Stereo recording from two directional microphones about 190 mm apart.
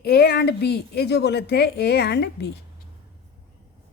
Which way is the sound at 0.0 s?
60° left (ahead or behind).